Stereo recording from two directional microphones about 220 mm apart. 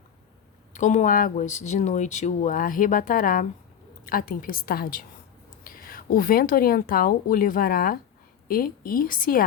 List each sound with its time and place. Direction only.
0.7 s speech: 35° left (ahead or behind)